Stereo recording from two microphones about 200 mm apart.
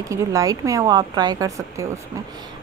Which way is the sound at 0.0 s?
15° right (ahead or behind).